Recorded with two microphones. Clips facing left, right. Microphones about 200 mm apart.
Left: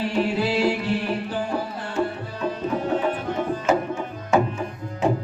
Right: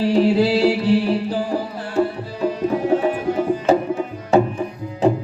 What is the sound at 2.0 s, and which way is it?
Music, 35° right (ahead or behind).